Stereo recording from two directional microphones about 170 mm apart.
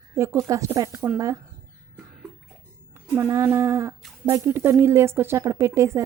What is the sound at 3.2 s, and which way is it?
A woman's voice, 20° right (ahead or behind).